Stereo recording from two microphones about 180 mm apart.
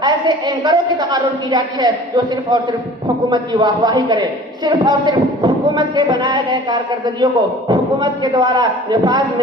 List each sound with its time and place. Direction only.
0.0 s speech: 25° right (ahead or behind)